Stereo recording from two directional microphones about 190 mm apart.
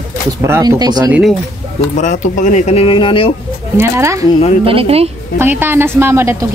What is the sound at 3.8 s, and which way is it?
Speech, 15° right (ahead or behind).